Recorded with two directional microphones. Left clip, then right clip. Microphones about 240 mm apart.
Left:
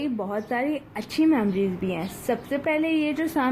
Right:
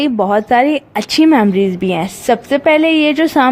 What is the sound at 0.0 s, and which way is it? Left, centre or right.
Speech, right.